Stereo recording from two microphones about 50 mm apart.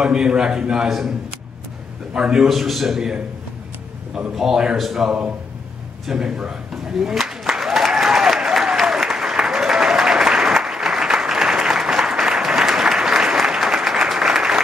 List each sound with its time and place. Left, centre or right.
0.0 s a man's voice: centre
0.8 s a man's voice: centre
2.1 s a man's voice: centre
2.4 s a man's voice: centre
4.4 s a man's voice: centre
6.0 s a man's voice: centre
6.7 s applause: centre